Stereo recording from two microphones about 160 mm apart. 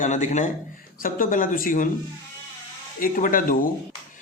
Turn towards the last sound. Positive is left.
turn(degrees=60)  # may be behind; listen again after turning